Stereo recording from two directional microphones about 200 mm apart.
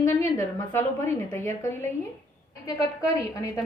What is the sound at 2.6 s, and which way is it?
Speech, 15° left (ahead or behind).